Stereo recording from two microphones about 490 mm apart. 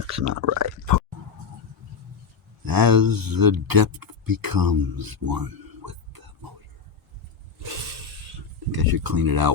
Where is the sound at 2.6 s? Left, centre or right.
Right.